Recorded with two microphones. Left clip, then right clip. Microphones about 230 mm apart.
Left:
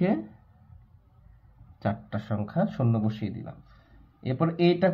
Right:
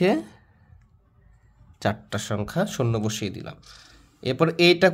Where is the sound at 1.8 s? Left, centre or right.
Right.